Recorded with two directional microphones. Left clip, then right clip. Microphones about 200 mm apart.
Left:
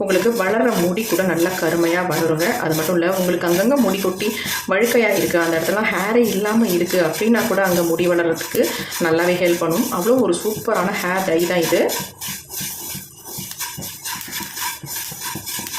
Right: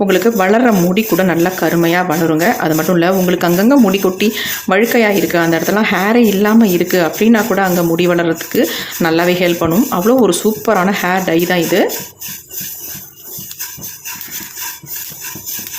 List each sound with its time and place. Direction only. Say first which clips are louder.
0.1 s speech: right 4 dB; 50° right (ahead or behind)